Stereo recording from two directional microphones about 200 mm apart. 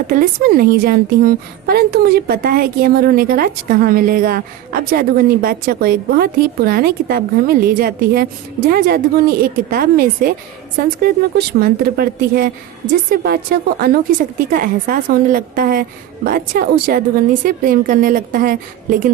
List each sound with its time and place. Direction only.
0.1 s a woman's voice: 45° right (ahead or behind)